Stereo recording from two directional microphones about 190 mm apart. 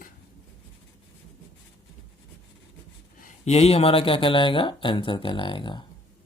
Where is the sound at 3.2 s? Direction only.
35° left (ahead or behind).